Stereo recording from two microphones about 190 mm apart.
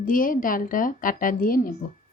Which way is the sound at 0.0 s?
45° left (ahead or behind).